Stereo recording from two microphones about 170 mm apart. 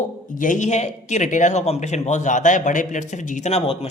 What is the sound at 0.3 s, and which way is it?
Speech, 50° left (ahead or behind).